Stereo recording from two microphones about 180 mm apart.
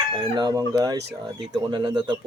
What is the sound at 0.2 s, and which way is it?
Speech, 25° right (ahead or behind).